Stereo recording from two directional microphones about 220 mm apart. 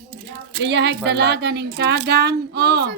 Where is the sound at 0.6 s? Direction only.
50° right (ahead or behind).